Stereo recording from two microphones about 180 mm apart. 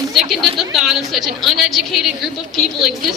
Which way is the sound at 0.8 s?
Centre (ahead or behind).